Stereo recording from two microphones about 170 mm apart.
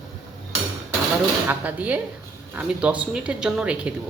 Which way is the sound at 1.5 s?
10° right (ahead or behind).